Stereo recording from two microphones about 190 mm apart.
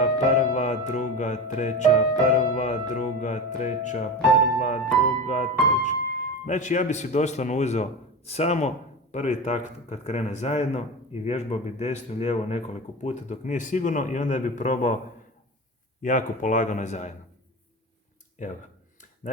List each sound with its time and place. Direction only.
0.0 s speech: 40° left (ahead or behind)
5.2 s speech: 40° left (ahead or behind)
16.0 s speech: 40° left (ahead or behind)